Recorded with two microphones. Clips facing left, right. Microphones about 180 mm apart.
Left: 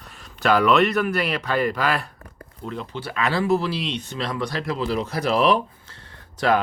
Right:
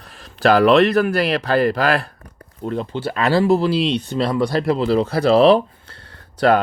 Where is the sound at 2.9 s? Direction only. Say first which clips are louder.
Right 6 dB; 30° right (ahead or behind).